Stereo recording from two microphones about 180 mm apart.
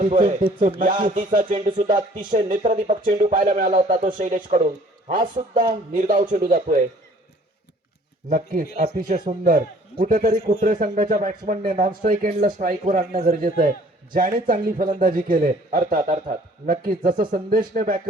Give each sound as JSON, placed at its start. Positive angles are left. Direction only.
{"t": 0.0, "sound": "a man's voice", "side_deg": -40}
{"t": 8.3, "sound": "a man's voice", "side_deg": -50}